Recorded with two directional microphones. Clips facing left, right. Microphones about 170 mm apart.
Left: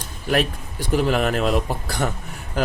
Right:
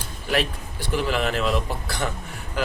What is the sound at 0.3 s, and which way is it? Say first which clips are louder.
Speech: left 3 dB; 45° left (ahead or behind).